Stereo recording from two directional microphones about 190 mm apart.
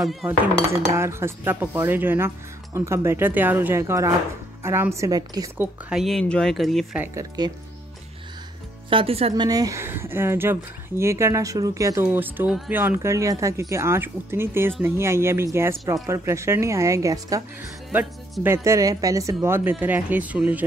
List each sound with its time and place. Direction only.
0.1 s speech: centre (ahead or behind)
0.9 s a woman's voice: 15° right (ahead or behind)
5.9 s speech: centre (ahead or behind)
7.0 s speech: 20° right (ahead or behind)
8.9 s speech: 30° right (ahead or behind)
9.3 s a woman's voice: 20° right (ahead or behind)